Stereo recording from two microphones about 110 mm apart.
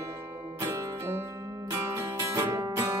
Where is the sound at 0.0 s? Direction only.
30° right (ahead or behind).